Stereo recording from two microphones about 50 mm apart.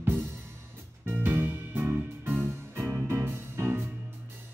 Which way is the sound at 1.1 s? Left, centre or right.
Right.